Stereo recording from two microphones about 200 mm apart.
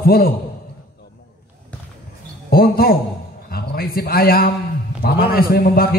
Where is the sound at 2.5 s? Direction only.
50° left (ahead or behind).